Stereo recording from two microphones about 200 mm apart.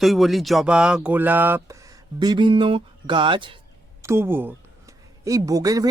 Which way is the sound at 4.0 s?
15° right (ahead or behind).